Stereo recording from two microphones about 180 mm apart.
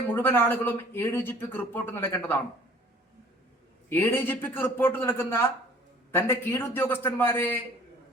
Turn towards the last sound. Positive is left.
turn(degrees=10)  # may be behind; listen again after turning